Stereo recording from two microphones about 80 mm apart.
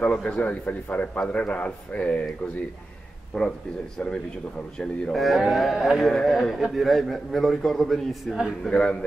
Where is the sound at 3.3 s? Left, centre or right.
Centre.